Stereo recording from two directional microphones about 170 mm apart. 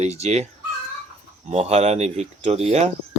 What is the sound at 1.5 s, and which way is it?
Speech, 40° right (ahead or behind).